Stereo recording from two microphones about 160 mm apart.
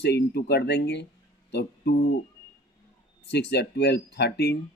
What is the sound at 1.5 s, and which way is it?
Music, 90° left.